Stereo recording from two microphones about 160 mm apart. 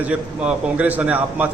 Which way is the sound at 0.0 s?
10° right (ahead or behind).